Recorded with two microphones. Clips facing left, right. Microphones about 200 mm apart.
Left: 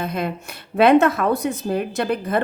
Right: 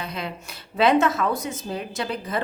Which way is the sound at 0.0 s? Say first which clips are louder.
Left 7 dB; 50° left (ahead or behind).